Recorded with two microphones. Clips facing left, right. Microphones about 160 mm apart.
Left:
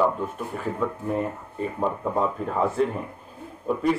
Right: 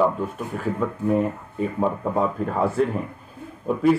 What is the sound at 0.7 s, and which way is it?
Speech, 5° right (ahead or behind).